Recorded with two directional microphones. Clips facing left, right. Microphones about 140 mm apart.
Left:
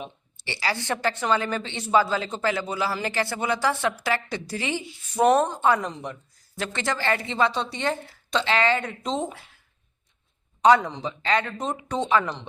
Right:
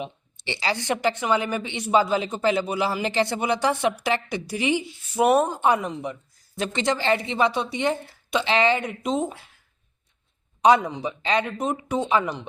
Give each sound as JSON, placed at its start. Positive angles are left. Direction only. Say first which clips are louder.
{"t": 0.3, "sound": "speech", "louder": "right 2 dB", "side_deg": -20}
{"t": 6.6, "sound": "speech", "louder": "right 3 dB", "side_deg": -20}
{"t": 10.6, "sound": "speech", "louder": "even", "side_deg": -15}